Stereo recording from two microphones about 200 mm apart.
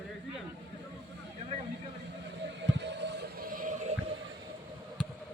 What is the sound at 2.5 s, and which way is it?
Music, 60° right (ahead or behind).